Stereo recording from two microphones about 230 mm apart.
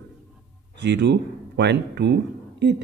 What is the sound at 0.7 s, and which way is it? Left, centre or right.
Speech, right.